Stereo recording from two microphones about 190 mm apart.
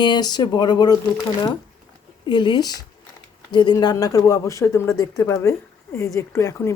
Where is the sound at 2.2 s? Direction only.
25° left (ahead or behind).